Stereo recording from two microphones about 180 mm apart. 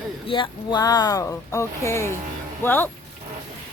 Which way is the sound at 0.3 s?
25° left (ahead or behind).